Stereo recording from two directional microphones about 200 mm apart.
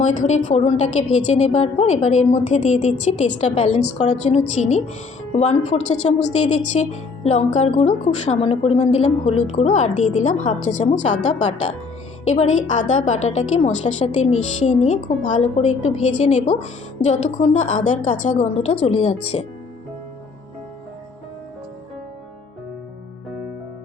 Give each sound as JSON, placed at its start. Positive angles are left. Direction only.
{"t": 0.0, "sound": "a woman's voice", "side_deg": 40}